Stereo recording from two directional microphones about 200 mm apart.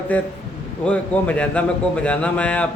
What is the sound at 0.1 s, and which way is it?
A man's voice, 5° left (ahead or behind).